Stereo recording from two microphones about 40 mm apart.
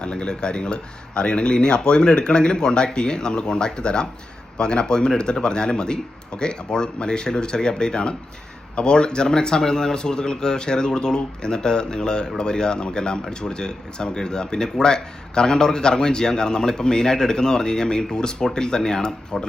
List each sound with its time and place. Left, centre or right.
0.0 s speech: left